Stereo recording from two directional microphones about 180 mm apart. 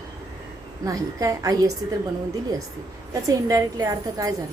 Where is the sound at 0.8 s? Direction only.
20° right (ahead or behind).